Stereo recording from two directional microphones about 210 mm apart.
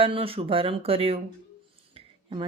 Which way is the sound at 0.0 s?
25° right (ahead or behind).